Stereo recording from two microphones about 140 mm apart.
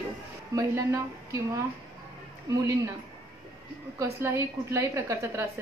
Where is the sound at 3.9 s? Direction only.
20° right (ahead or behind).